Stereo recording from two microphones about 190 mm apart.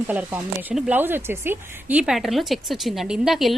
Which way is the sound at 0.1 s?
10° right (ahead or behind).